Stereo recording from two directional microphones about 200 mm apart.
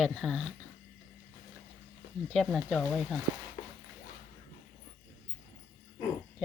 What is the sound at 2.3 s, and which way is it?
Speech, centre (ahead or behind).